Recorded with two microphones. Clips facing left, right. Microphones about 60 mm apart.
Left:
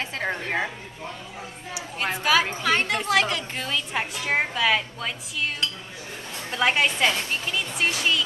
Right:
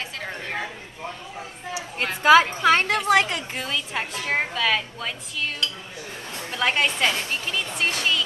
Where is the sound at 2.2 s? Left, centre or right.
Right.